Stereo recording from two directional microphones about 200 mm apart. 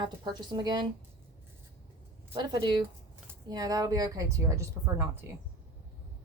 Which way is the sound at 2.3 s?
20° right (ahead or behind).